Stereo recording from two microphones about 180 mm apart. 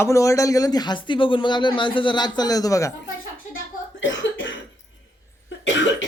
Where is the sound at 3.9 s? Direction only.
90° left.